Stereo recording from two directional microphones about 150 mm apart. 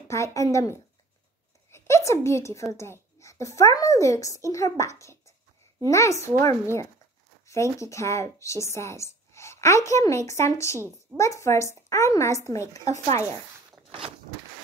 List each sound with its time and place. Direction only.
0.1 s speech: 20° left (ahead or behind)
1.7 s a sound: 20° left (ahead or behind)
2.7 s speech: 20° left (ahead or behind)